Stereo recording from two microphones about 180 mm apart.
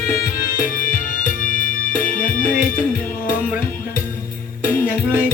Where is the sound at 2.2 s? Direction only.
50° left (ahead or behind).